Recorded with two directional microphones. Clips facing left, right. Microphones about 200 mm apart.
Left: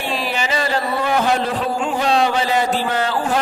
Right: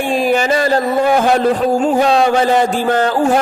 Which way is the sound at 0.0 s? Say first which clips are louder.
Right 9 dB; 50° right (ahead or behind).